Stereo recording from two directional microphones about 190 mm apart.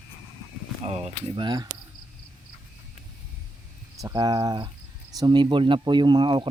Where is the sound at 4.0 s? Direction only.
20° right (ahead or behind).